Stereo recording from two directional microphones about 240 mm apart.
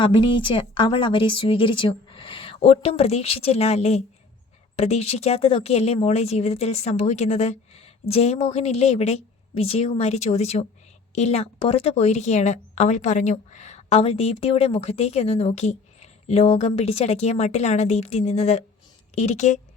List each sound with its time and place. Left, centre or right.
0.0 s speech: centre